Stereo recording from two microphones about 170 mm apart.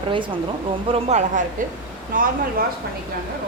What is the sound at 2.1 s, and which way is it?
Speech, 55° right (ahead or behind).